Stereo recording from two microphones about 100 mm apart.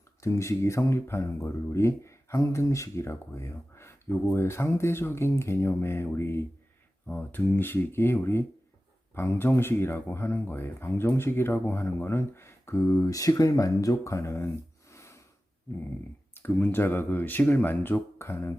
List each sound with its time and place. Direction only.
0.2 s speech: 30° left (ahead or behind)
14.9 s snort: 30° left (ahead or behind)
16.4 s speech: 20° left (ahead or behind)